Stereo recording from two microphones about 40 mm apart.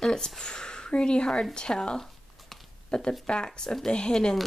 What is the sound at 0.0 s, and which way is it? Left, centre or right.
Speech, centre.